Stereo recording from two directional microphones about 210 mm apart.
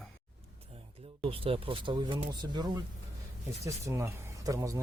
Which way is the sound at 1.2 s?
25° right (ahead or behind).